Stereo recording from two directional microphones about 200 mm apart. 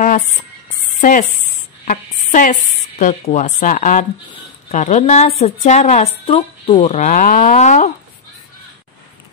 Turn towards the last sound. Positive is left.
turn(degrees=35)  # may be behind; listen again after turning